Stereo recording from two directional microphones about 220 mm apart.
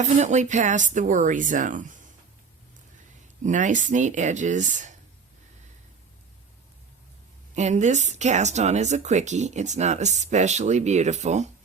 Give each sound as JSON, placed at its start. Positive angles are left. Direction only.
{"t": 0.0, "sound": "speech", "side_deg": -30}
{"t": 3.4, "sound": "speech", "side_deg": -35}
{"t": 7.5, "sound": "speech", "side_deg": -30}